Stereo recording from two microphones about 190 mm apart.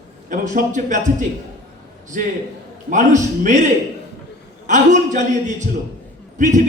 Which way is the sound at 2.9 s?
40° right (ahead or behind).